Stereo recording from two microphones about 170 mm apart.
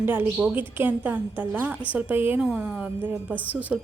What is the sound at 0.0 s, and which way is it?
Speech, 10° right (ahead or behind).